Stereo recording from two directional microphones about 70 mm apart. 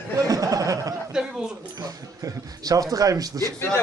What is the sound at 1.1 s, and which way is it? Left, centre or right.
Speech, centre.